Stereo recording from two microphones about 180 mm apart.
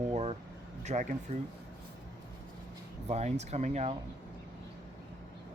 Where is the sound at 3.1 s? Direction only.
40° right (ahead or behind).